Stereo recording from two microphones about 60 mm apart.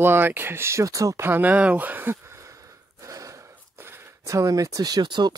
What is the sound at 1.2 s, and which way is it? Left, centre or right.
Speech, right.